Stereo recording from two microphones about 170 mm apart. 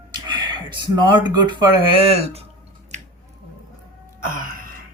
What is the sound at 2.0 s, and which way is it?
Speech, 35° right (ahead or behind).